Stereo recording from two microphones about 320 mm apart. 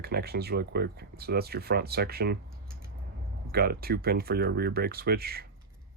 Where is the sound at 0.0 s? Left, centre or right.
Right.